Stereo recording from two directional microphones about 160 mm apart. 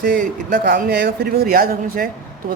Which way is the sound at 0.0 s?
55° right (ahead or behind).